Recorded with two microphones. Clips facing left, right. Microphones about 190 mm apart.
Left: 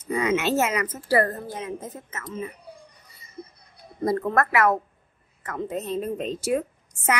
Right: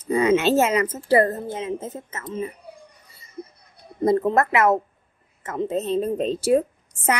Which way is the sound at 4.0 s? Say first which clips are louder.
Right 4 dB; 20° right (ahead or behind).